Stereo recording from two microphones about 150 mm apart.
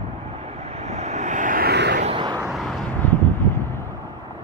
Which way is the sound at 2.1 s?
30° right (ahead or behind).